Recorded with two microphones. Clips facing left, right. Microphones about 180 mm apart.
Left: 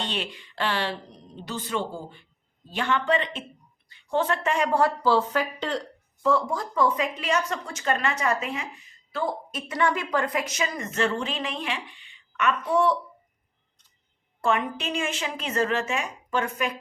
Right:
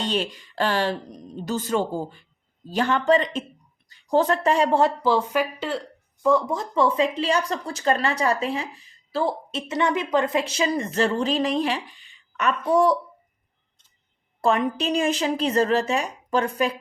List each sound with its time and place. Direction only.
0.0 s speech: 40° right (ahead or behind)
14.4 s speech: 35° right (ahead or behind)